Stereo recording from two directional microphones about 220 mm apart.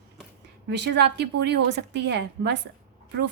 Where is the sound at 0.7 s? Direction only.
50° right (ahead or behind).